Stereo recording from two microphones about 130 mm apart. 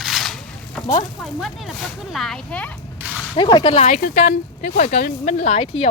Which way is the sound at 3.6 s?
55° left (ahead or behind).